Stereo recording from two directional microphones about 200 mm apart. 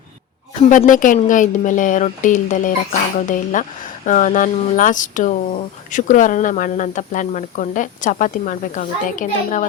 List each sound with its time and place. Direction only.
0.7 s speech: 40° left (ahead or behind)